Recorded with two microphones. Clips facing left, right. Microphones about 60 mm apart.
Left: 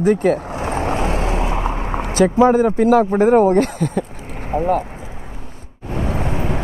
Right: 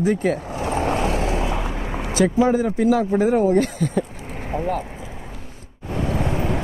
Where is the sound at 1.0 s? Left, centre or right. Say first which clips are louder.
Left 2 dB; left.